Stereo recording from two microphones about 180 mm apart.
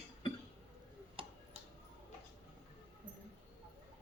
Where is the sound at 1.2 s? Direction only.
30° right (ahead or behind).